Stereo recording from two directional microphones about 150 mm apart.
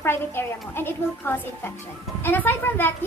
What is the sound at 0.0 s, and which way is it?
A woman's voice, 15° left (ahead or behind).